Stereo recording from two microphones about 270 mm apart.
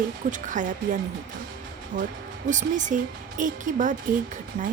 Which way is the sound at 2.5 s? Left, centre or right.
Right.